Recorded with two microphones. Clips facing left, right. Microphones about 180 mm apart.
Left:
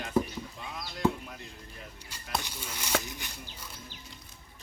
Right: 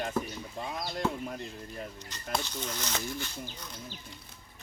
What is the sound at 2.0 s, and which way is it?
Speech, 10° left (ahead or behind).